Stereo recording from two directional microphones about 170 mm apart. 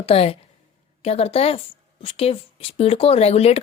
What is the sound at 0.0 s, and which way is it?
A woman's voice, 35° left (ahead or behind).